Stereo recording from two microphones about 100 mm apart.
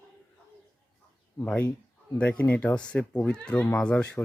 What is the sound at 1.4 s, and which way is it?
Speech, 10° left (ahead or behind).